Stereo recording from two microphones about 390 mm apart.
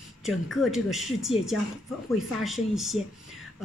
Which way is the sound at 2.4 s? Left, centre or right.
Centre.